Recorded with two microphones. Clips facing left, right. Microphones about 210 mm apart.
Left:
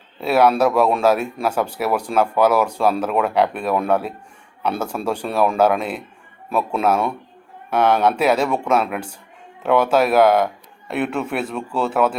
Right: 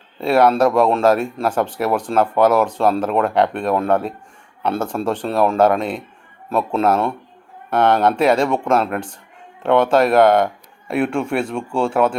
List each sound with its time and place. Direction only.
0.2 s speech: 5° left (ahead or behind)